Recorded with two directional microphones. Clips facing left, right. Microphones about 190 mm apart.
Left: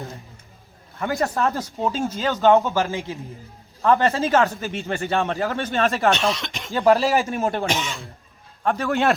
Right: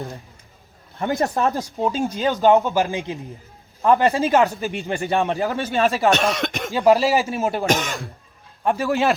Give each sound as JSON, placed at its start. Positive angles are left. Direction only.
{"t": 0.9, "sound": "speech", "side_deg": -25}
{"t": 6.1, "sound": "speech", "side_deg": -55}
{"t": 6.7, "sound": "speech", "side_deg": -15}
{"t": 7.9, "sound": "speech", "side_deg": -55}
{"t": 8.6, "sound": "speech", "side_deg": -10}